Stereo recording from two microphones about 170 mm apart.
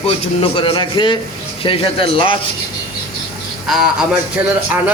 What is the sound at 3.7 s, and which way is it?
Speech, 5° right (ahead or behind).